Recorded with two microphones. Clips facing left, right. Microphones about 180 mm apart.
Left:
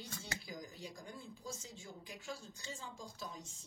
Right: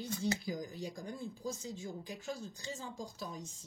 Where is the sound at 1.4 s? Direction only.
35° right (ahead or behind).